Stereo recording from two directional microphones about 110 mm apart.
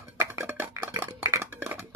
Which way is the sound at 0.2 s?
20° right (ahead or behind).